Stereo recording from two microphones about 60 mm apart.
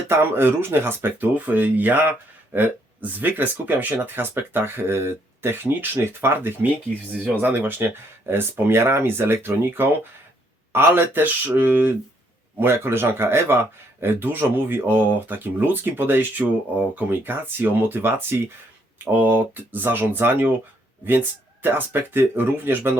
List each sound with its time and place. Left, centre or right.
0.1 s speech: right